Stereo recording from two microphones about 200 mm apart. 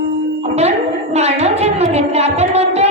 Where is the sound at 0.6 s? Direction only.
35° right (ahead or behind).